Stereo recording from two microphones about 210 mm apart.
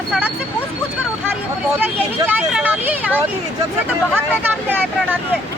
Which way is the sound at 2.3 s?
10° right (ahead or behind).